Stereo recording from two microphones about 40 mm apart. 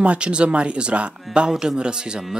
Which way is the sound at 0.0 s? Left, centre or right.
Right.